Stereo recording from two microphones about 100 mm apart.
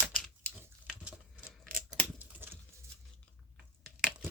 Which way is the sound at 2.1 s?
20° right (ahead or behind).